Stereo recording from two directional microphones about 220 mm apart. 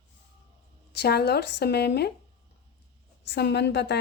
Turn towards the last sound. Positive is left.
turn(degrees=50)  # may be behind; listen again after turning